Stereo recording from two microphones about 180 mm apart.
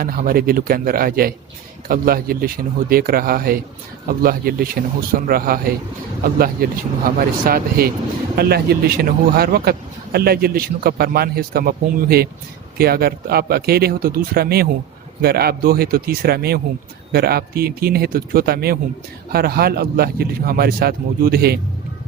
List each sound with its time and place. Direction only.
0.0 s a man's voice: 55° right (ahead or behind)